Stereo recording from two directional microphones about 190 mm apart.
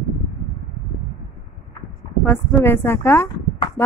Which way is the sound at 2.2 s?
10° left (ahead or behind).